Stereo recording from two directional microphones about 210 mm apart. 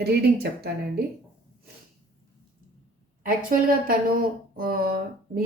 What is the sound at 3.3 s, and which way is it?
A woman's voice, 40° right (ahead or behind).